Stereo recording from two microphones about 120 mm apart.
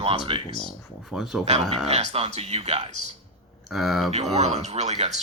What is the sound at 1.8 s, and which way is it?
Speech, 60° right (ahead or behind).